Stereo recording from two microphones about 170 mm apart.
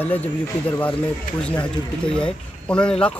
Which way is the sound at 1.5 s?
5° left (ahead or behind).